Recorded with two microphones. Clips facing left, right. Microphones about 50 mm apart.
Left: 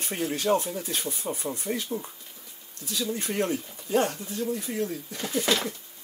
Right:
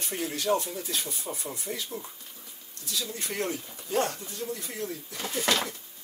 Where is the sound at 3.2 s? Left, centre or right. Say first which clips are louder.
Left 4 dB; left.